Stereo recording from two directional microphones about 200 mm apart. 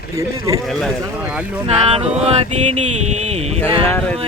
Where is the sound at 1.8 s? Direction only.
30° right (ahead or behind).